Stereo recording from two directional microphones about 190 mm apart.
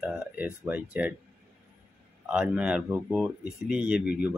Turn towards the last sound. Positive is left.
turn(degrees=-5)  # may be behind; listen again after turning